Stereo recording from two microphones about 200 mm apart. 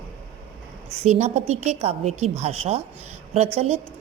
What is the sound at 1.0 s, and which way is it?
Speech, 35° right (ahead or behind).